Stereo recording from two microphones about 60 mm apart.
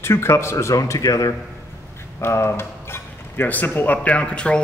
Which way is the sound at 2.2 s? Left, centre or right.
Left.